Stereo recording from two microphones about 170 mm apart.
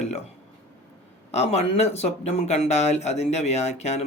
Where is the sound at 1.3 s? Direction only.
40° left (ahead or behind).